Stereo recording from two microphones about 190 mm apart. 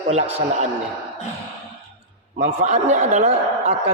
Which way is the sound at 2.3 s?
40° right (ahead or behind).